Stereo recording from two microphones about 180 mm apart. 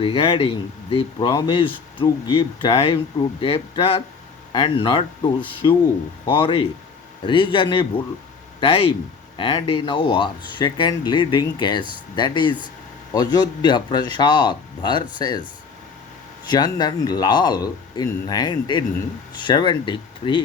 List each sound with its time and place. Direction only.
0.0 s speech: 30° left (ahead or behind)
6.3 s speech: 30° left (ahead or behind)
16.5 s speech: 25° left (ahead or behind)